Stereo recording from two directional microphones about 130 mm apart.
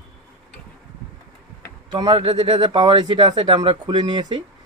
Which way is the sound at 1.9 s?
30° right (ahead or behind).